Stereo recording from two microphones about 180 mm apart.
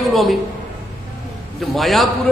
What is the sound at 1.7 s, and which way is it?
Speech, centre (ahead or behind).